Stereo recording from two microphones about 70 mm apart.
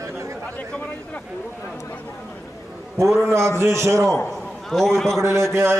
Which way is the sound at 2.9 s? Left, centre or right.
Right.